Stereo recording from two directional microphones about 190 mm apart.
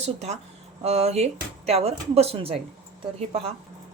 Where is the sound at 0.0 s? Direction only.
35° right (ahead or behind).